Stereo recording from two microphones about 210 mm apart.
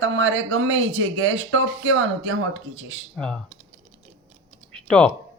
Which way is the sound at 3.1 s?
5° left (ahead or behind).